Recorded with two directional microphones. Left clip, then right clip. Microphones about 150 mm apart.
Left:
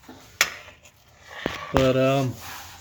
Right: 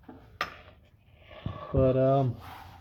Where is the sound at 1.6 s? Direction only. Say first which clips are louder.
Left 4 dB; 30° left (ahead or behind).